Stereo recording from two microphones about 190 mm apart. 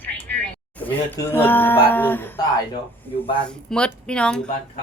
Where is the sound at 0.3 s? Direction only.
10° left (ahead or behind).